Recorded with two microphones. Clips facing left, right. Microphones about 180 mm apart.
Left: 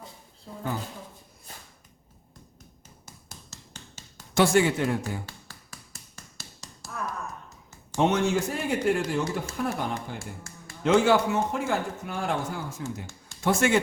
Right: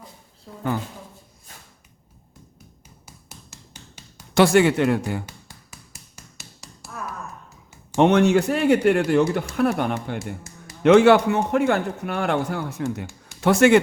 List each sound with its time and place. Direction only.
3.1 s hammer: 10° right (ahead or behind)
4.4 s speech: 70° right (ahead or behind)
6.1 s tap: 10° right (ahead or behind)
7.9 s speech: 65° right (ahead or behind)